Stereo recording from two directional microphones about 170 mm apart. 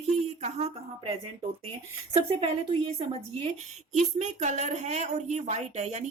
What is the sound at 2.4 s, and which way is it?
A woman's voice, 35° right (ahead or behind).